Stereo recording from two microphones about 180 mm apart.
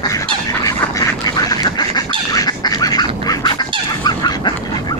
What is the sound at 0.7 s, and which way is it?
Duck, 20° left (ahead or behind).